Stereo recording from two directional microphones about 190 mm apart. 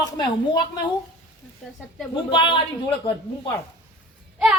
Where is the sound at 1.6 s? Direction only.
5° left (ahead or behind).